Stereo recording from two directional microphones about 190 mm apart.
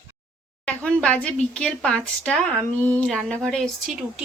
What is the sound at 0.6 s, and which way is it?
Speech, 5° left (ahead or behind).